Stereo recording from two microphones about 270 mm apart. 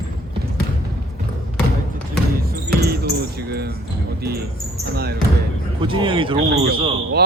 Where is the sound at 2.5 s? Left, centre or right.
Right.